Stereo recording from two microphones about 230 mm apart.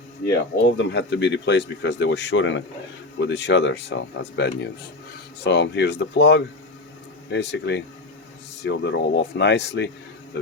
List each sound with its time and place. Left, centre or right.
0.8 s speech: left